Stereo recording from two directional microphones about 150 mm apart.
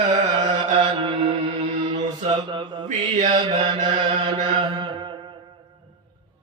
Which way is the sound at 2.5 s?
30° right (ahead or behind).